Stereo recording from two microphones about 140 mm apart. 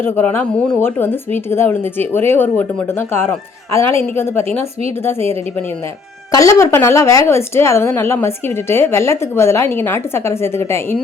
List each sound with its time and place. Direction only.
0.0 s a woman's voice: 15° left (ahead or behind)
6.3 s a woman's voice: 20° left (ahead or behind)